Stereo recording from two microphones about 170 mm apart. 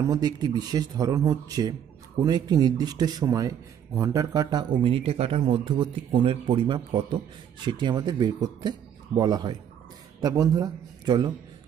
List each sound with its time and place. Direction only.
0.1 s speech: 25° right (ahead or behind)